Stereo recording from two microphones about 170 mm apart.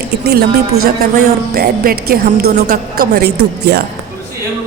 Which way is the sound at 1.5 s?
65° right (ahead or behind).